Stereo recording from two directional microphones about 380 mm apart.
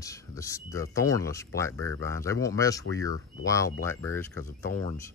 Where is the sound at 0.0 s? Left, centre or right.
Centre.